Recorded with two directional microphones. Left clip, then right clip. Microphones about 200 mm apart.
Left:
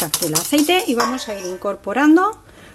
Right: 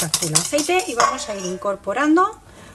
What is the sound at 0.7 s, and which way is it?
A woman's voice, 40° left (ahead or behind).